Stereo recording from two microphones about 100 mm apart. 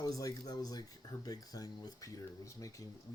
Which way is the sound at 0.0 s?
35° left (ahead or behind).